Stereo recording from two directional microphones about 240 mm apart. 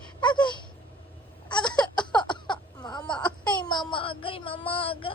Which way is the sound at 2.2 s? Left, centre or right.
Centre.